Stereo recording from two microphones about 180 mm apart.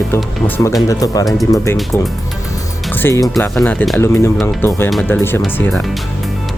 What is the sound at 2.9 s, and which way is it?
Speech, 15° left (ahead or behind).